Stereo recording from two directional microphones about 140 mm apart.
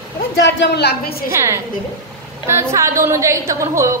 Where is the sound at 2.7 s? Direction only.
20° right (ahead or behind).